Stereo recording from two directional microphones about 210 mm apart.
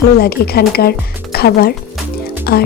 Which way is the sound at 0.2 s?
50° left (ahead or behind).